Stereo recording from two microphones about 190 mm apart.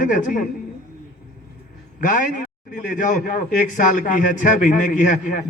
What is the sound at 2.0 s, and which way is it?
A man's voice, 40° left (ahead or behind).